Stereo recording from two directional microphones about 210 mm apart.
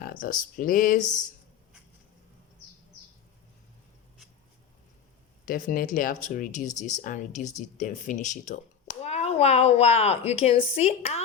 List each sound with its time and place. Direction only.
0.0 s a woman's voice: 40° left (ahead or behind)
5.5 s a woman's voice: 40° left (ahead or behind)